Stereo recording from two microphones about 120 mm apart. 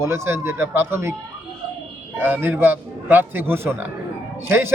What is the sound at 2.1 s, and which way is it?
A man's voice, 15° right (ahead or behind).